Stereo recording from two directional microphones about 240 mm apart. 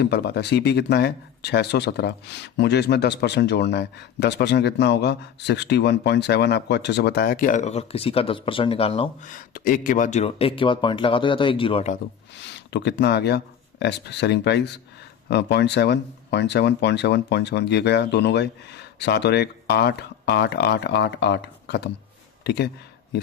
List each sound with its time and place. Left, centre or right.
0.0 s speech: left
12.4 s speech: left